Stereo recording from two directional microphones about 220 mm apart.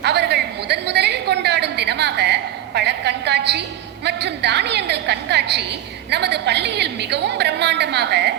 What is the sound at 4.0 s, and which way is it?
A woman's voice, 50° right (ahead or behind).